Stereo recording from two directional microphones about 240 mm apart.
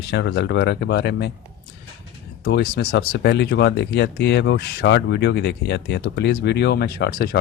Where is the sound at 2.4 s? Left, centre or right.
Left.